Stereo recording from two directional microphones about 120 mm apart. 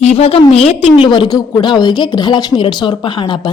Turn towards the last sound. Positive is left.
turn(degrees=40)  # may be behind; listen again after turning